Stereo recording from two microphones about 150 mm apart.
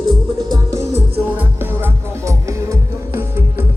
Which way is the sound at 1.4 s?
15° right (ahead or behind).